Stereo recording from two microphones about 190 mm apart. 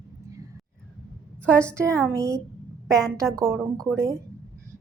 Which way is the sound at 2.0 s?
15° right (ahead or behind).